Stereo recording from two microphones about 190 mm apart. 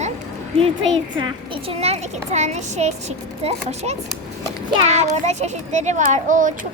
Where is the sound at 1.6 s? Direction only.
35° right (ahead or behind).